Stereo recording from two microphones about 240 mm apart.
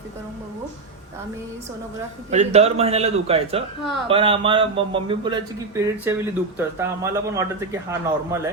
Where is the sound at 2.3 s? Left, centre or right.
Right.